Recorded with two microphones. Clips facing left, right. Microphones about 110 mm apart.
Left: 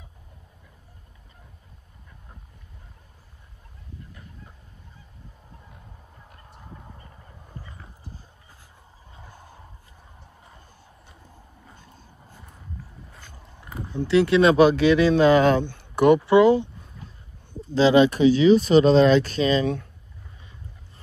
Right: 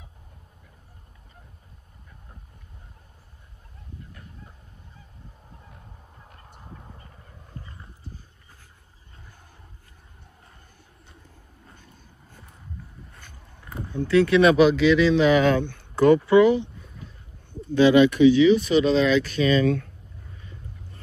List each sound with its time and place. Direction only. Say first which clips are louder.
13.7 s a sound: even; 10° left (ahead or behind)
13.9 s speech: even; 25° left (ahead or behind)
14.7 s speech: even; 45° left (ahead or behind)
15.7 s a sound: even; 25° left (ahead or behind)
16.3 s speech: left 2 dB; 25° left (ahead or behind)
17.6 s speech: right 1 dB; 30° left (ahead or behind)